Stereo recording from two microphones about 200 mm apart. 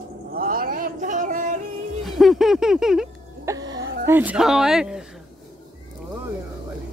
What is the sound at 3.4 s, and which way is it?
Music, 20° right (ahead or behind).